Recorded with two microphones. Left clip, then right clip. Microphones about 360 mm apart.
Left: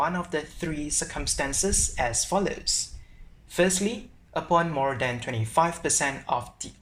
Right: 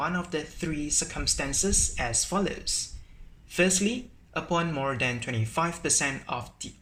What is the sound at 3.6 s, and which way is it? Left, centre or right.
Speech, left.